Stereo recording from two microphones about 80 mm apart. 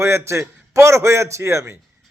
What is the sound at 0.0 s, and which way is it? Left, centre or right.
A man's voice, right.